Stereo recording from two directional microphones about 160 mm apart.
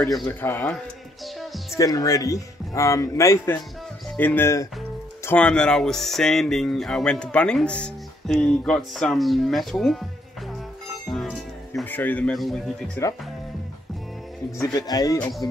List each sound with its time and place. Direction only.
0.4 s speech: 10° left (ahead or behind)
1.2 s music: centre (ahead or behind)
1.8 s a man's voice: 20° left (ahead or behind); by 10.0 s 5° left (ahead or behind)
11.1 s music: centre (ahead or behind)
11.8 s speech: 10° left (ahead or behind)
14.6 s a man's voice: 25° left (ahead or behind)